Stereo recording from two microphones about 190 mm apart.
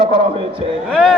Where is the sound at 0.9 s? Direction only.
Centre (ahead or behind).